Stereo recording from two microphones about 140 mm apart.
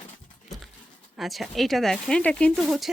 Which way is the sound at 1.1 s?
Centre (ahead or behind).